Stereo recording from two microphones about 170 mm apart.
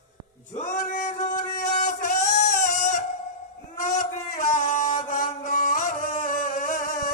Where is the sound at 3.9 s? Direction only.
50° left (ahead or behind).